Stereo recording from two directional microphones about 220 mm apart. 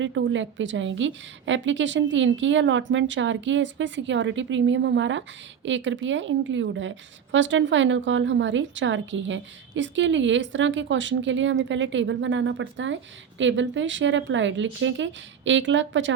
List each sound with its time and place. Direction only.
0.0 s a woman's voice: 55° right (ahead or behind)